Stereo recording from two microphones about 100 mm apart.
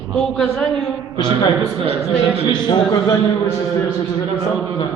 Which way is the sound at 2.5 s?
45° left (ahead or behind).